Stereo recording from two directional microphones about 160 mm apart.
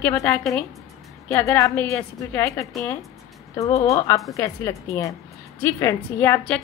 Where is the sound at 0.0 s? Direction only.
10° left (ahead or behind).